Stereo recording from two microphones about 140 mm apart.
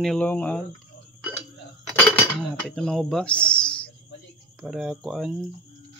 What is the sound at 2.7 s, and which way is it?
Speech, 5° left (ahead or behind).